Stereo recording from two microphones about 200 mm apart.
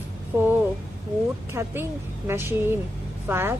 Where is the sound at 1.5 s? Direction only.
10° right (ahead or behind).